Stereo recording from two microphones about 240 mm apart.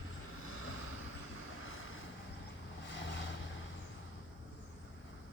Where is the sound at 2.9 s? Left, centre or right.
Left.